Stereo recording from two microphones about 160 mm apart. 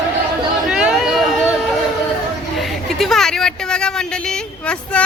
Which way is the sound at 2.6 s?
Centre (ahead or behind).